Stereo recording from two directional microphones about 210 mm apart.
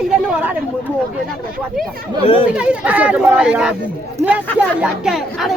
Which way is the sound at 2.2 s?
25° left (ahead or behind).